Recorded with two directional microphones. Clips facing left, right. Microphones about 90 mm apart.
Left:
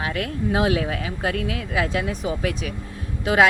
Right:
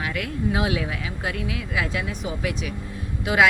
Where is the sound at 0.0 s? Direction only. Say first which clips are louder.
Left 1 dB; 35° left (ahead or behind).